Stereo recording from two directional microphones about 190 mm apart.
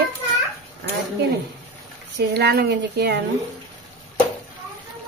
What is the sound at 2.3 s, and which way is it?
Speech, 60° right (ahead or behind).